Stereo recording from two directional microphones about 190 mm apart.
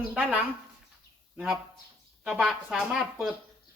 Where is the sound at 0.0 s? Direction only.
5° right (ahead or behind).